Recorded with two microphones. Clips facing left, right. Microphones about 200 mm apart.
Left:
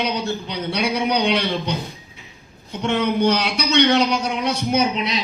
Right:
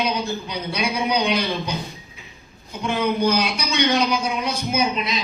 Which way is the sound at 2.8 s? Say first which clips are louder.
Left 2 dB; 70° left (ahead or behind).